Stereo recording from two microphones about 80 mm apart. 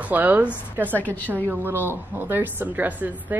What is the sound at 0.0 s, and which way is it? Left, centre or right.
Speech, right.